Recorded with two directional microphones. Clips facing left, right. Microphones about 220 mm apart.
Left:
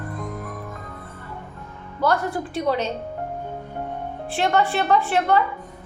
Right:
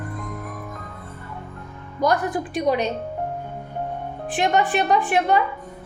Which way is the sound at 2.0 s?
15° right (ahead or behind).